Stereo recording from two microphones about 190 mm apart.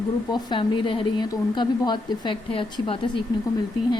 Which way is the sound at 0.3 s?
20° left (ahead or behind).